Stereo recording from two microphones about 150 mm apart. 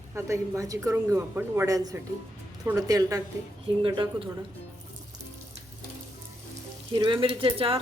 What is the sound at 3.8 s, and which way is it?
Speech, 35° right (ahead or behind).